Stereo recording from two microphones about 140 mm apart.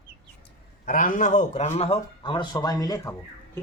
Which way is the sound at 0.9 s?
75° left (ahead or behind).